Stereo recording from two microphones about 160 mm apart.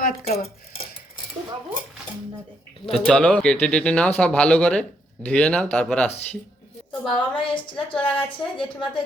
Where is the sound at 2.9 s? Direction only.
5° left (ahead or behind).